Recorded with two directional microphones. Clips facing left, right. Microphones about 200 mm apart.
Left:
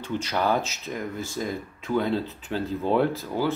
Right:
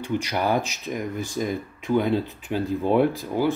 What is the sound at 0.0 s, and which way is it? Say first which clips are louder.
Speech: right 1 dB; 15° right (ahead or behind).